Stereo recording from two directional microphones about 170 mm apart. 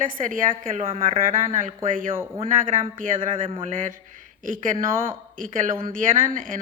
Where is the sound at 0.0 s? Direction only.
50° right (ahead or behind).